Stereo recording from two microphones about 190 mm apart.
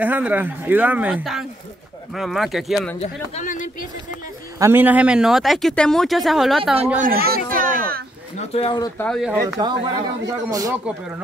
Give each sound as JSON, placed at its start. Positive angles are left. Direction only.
{"t": 0.0, "sound": "speech", "side_deg": -10}
{"t": 3.0, "sound": "speech", "side_deg": 40}
{"t": 4.6, "sound": "speech", "side_deg": -10}
{"t": 7.0, "sound": "a sound", "side_deg": -50}
{"t": 8.4, "sound": "speech", "side_deg": 30}
{"t": 8.9, "sound": "speech", "side_deg": 5}
{"t": 9.6, "sound": "speech", "side_deg": -25}